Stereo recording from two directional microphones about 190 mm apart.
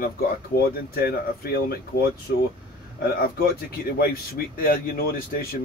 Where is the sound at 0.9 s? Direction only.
50° left (ahead or behind).